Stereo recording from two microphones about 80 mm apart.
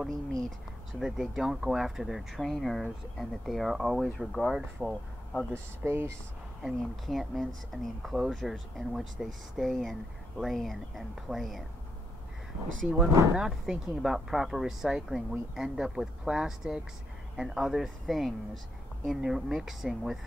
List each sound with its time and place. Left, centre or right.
0.0 s speech: centre
5.5 s speech: right
6.6 s speech: centre
13.4 s speech: centre